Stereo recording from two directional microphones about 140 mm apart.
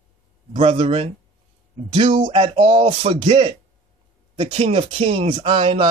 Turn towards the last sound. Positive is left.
turn(degrees=-45)  # may be behind; listen again after turning